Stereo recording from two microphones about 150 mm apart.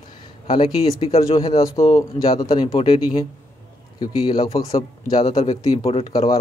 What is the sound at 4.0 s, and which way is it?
A man's voice, 30° left (ahead or behind).